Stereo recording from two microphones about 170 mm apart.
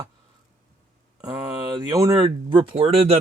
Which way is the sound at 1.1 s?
25° right (ahead or behind).